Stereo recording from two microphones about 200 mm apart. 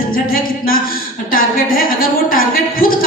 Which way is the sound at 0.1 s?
45° left (ahead or behind).